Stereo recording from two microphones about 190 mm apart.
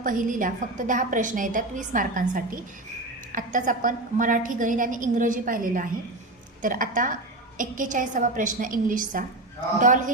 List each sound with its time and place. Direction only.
0.0 s a woman's voice: 45° right (ahead or behind)